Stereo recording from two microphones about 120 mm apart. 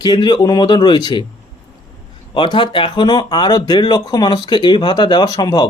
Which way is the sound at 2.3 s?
40° left (ahead or behind).